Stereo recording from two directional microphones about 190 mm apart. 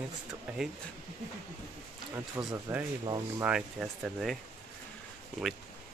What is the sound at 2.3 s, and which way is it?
Speech, 10° right (ahead or behind).